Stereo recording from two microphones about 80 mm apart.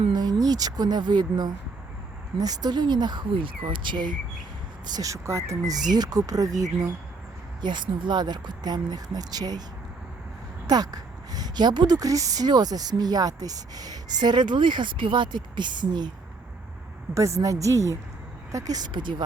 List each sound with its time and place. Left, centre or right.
0.1 s speech: right
4.9 s speech: right
5.7 s speech: right
7.6 s speech: right
10.7 s speech: right
11.9 s speech: right
17.2 s speech: right
18.5 s speech: right
18.9 s speech: right